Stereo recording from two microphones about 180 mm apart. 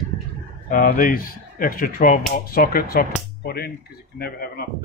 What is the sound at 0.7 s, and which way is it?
Speech, 50° left (ahead or behind).